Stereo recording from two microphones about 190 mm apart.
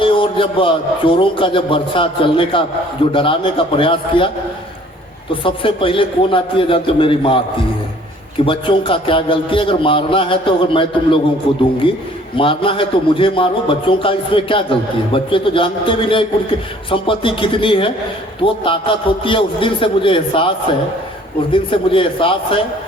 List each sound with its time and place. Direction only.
0.0 s a man's voice: 25° left (ahead or behind)
5.3 s a man's voice: 25° left (ahead or behind)
8.4 s a man's voice: 25° left (ahead or behind)
12.4 s a man's voice: 25° left (ahead or behind)
21.5 s a man's voice: 25° left (ahead or behind)